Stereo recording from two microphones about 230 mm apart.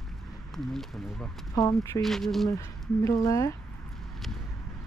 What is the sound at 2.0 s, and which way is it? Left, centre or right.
Speech, centre.